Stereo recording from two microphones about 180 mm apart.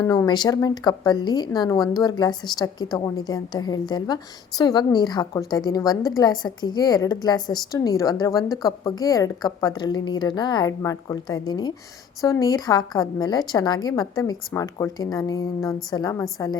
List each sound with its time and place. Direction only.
0.0 s speech: 20° left (ahead or behind)